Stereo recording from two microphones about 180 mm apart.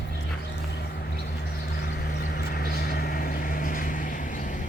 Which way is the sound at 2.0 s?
70° left (ahead or behind).